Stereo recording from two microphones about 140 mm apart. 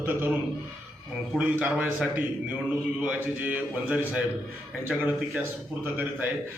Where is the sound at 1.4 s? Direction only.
10° right (ahead or behind).